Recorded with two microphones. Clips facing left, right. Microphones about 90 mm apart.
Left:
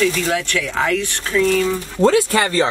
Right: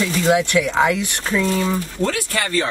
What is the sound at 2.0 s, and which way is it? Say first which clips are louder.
Speech: left 10 dB; 25° left (ahead or behind).